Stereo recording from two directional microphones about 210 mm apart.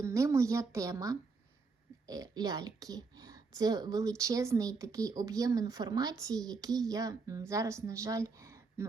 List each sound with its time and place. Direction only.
0.0 s speech: 15° right (ahead or behind)